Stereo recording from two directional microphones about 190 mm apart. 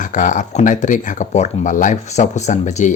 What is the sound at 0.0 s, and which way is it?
Speech, 40° left (ahead or behind).